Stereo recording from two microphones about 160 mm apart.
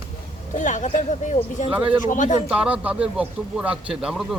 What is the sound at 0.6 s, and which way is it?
Speech, 50° left (ahead or behind).